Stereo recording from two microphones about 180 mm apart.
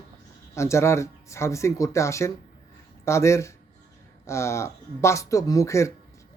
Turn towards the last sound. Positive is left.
turn(degrees=15)  # may be behind; listen again after turning